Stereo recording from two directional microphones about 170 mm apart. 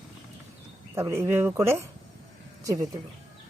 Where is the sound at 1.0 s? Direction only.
15° right (ahead or behind).